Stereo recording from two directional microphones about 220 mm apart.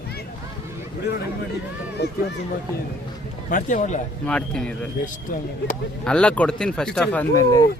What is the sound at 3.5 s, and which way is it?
Speech, 35° left (ahead or behind).